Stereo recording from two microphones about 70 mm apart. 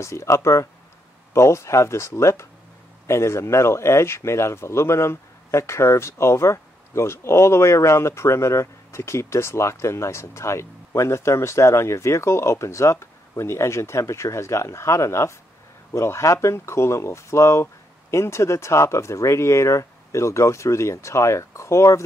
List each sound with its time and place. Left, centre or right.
0.0 s speech: left